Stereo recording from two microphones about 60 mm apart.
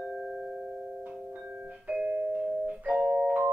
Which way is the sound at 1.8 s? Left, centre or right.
Right.